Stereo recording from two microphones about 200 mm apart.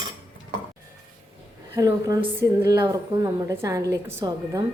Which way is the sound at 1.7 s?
20° right (ahead or behind).